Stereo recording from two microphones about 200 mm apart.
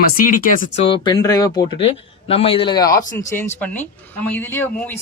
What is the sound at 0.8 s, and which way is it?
Speech, 25° left (ahead or behind).